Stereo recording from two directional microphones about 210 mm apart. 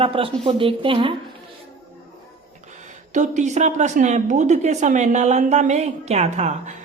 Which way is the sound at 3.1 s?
35° right (ahead or behind).